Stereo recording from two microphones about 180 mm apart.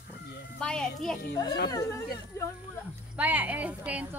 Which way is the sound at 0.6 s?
5° left (ahead or behind).